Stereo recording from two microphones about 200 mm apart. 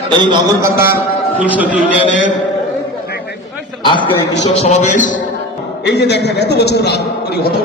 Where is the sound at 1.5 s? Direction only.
5° right (ahead or behind).